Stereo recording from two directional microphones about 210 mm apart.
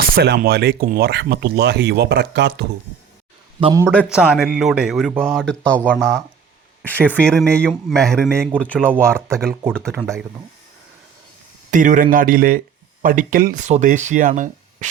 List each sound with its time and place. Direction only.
0.0 s speech: 50° right (ahead or behind)
3.6 s a man's voice: 20° right (ahead or behind)
3.8 s speech: centre (ahead or behind)
11.7 s speech: 40° right (ahead or behind)